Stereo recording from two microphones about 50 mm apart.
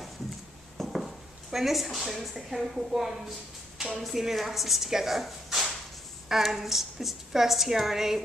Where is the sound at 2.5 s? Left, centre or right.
Centre.